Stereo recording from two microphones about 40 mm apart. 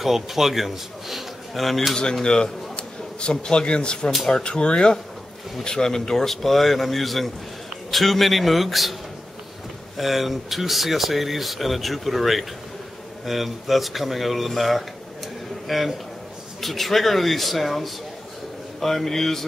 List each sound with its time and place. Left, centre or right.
0.0 s speech: centre
2.2 s a man's voice: left; by 8.9 s centre
9.9 s a man's voice: centre